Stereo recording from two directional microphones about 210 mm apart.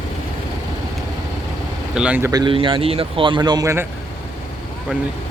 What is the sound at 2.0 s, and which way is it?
Speech, 5° right (ahead or behind).